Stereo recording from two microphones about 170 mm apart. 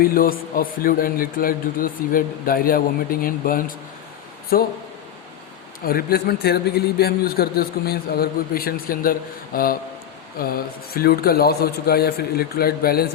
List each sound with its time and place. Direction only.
0.0 s a man's voice: 60° left (ahead or behind)
5.8 s a man's voice: 60° left (ahead or behind)
10.9 s a man's voice: 65° left (ahead or behind)